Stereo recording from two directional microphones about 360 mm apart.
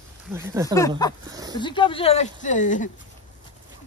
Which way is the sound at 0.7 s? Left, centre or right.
Centre.